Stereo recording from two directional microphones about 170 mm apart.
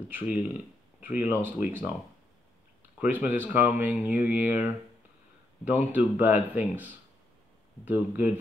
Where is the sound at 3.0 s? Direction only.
10° right (ahead or behind).